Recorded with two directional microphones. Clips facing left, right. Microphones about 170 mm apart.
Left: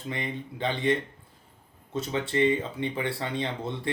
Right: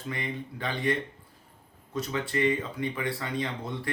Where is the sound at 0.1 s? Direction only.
25° left (ahead or behind).